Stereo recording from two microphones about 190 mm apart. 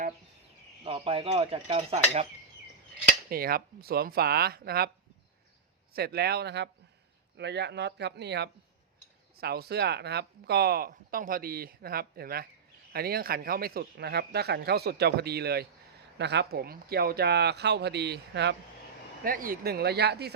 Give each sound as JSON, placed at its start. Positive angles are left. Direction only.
{"t": 0.9, "sound": "speech", "side_deg": -30}
{"t": 3.2, "sound": "speech", "side_deg": -50}
{"t": 5.9, "sound": "speech", "side_deg": -55}
{"t": 19.2, "sound": "speech", "side_deg": -50}